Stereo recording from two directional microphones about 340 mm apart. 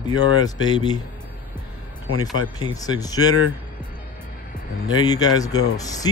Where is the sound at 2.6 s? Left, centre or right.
Centre.